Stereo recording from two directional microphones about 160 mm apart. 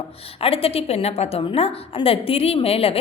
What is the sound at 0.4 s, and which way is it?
A woman's voice, 35° left (ahead or behind).